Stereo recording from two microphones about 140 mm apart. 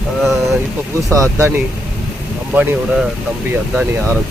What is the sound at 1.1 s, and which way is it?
Speech, 20° right (ahead or behind).